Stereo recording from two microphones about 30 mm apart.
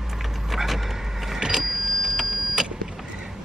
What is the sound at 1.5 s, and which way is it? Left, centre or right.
Vehicle, centre.